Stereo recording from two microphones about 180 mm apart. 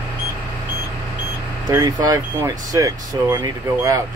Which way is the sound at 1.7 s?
20° right (ahead or behind).